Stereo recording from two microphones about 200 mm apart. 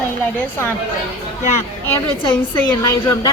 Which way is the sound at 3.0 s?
20° left (ahead or behind).